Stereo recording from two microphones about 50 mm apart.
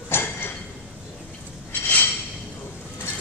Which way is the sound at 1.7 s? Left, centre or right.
Left.